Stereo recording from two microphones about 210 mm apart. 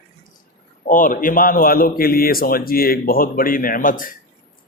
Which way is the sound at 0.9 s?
40° left (ahead or behind).